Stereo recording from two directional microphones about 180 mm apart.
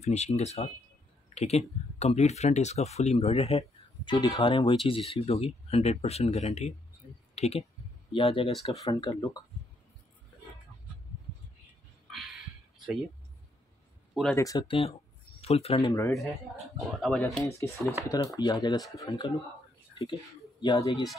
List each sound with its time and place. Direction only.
0.0 s speech: 40° left (ahead or behind); by 9.4 s 20° left (ahead or behind)
14.3 s speech: 20° left (ahead or behind); by 15.9 s 35° left (ahead or behind)
16.1 s speech: centre (ahead or behind)
17.4 s speech: 15° left (ahead or behind)
19.9 s a sound: 30° left (ahead or behind)
20.6 s speech: 25° left (ahead or behind)